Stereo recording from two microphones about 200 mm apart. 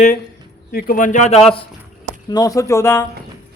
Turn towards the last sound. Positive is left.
turn(degrees=10)  # may be behind; listen again after turning